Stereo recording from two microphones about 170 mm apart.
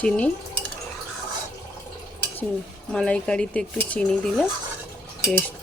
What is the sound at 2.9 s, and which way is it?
Speech, 5° left (ahead or behind).